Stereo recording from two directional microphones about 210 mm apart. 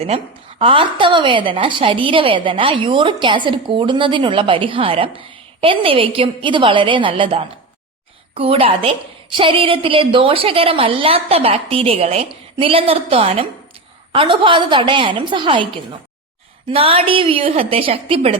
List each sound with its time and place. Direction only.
0.6 s a woman's voice: 25° right (ahead or behind)
16.6 s a woman's voice: 25° right (ahead or behind)